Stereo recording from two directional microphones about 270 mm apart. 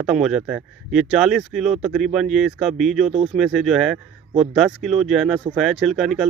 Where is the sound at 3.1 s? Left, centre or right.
Right.